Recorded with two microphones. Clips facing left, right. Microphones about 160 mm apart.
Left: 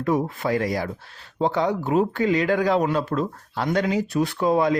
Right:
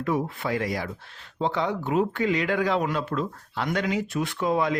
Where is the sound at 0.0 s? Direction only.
40° left (ahead or behind).